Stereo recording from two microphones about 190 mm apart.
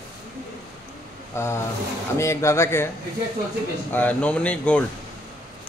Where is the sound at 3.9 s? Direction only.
5° left (ahead or behind).